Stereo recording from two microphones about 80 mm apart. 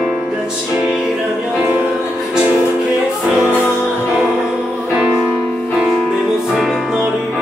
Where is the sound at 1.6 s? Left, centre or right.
Right.